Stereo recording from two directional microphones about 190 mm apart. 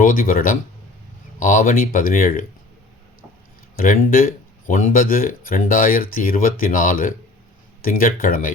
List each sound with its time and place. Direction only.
0.0 s speech: 45° left (ahead or behind)
3.8 s speech: 50° left (ahead or behind)